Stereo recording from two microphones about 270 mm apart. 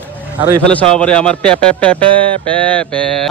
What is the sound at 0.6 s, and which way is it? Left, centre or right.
Speech, centre.